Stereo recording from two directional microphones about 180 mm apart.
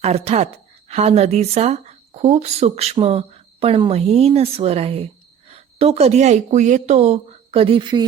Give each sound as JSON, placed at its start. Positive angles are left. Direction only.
{"t": 0.0, "sound": "a woman's voice", "side_deg": -35}